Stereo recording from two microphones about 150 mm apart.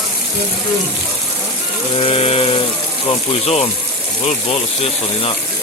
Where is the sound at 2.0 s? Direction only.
40° left (ahead or behind).